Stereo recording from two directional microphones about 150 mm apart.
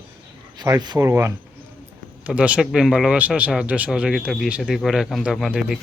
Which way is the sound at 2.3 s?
5° right (ahead or behind).